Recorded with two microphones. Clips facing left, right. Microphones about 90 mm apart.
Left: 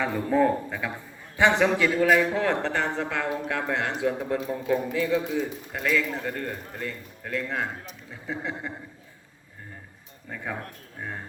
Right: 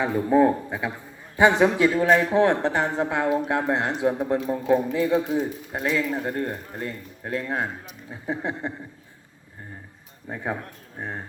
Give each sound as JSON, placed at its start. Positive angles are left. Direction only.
{"t": 0.0, "sound": "a man's voice", "side_deg": -20}
{"t": 10.2, "sound": "a man's voice", "side_deg": -25}